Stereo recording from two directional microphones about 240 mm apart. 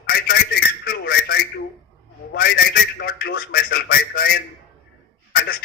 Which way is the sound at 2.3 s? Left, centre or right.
Left.